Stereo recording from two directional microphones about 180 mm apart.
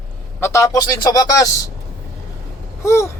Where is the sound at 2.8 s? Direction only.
15° left (ahead or behind).